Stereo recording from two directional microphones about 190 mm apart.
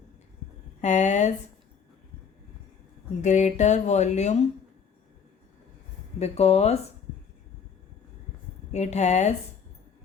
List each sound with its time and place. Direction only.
0.8 s speech: 40° left (ahead or behind)
3.2 s speech: 40° left (ahead or behind)
6.1 s speech: 35° left (ahead or behind)
8.7 s speech: 35° left (ahead or behind)